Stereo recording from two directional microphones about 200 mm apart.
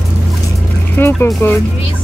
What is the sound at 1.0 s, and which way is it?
Speech, 10° left (ahead or behind).